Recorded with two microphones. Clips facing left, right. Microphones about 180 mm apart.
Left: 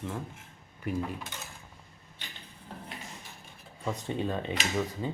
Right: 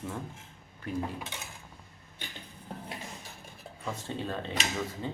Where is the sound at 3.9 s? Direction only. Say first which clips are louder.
Left 4 dB; 15° left (ahead or behind).